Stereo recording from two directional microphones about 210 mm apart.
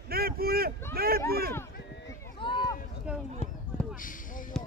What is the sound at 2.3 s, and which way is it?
Run, 25° left (ahead or behind).